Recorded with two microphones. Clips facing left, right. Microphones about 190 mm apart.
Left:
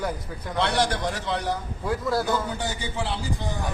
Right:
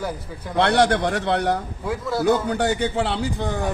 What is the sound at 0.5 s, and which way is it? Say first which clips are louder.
A man's voice: right 7 dB; 65° right (ahead or behind).